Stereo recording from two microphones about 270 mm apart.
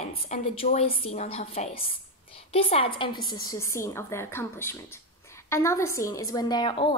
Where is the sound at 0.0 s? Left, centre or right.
Left.